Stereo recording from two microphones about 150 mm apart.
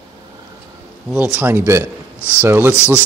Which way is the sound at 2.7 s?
15° left (ahead or behind).